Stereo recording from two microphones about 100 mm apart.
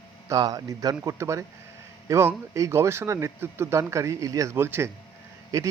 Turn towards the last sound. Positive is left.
turn(degrees=-35)  # may be behind; listen again after turning